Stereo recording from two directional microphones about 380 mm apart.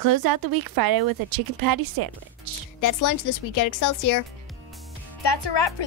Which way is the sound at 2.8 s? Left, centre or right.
Left.